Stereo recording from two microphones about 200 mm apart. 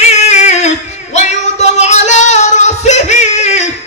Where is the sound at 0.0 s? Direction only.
35° left (ahead or behind).